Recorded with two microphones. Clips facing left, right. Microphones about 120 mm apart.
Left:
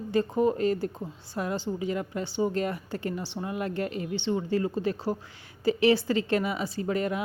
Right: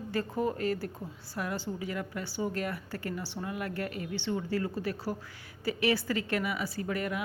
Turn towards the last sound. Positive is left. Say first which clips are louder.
# left 5 dB
turn(degrees=25)  # may be behind; listen again after turning